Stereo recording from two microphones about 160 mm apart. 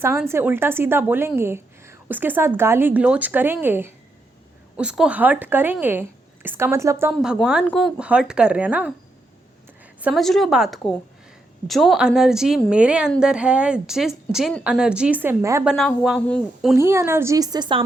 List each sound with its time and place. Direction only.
0.3 s a woman's voice: 15° right (ahead or behind)
7.1 s a woman's voice: centre (ahead or behind)
10.0 s a woman's voice: centre (ahead or behind); by 15.6 s 15° right (ahead or behind)
15.6 s a woman's voice: centre (ahead or behind)
16.7 s a woman's voice: 15° right (ahead or behind)